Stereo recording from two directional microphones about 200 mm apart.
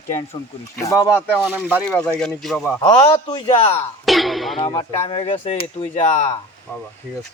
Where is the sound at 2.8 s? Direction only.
20° left (ahead or behind).